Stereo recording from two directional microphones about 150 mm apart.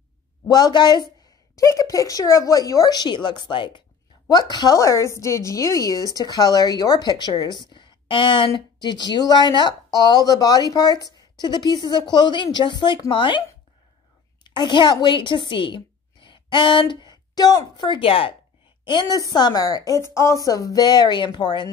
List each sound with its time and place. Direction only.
0.5 s a woman's voice: 25° left (ahead or behind)
14.4 s a woman's voice: 30° left (ahead or behind)